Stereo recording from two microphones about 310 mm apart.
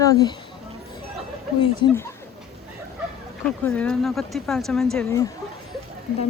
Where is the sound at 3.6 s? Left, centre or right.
Centre.